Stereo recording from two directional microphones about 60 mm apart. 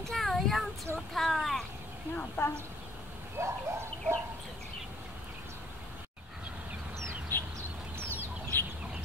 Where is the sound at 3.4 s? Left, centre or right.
Right.